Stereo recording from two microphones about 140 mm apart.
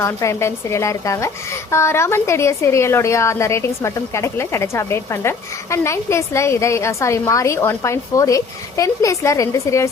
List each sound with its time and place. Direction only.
0.0 s a woman's voice: 20° left (ahead or behind)